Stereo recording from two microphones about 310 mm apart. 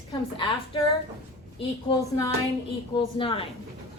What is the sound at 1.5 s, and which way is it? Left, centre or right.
A woman's voice, centre.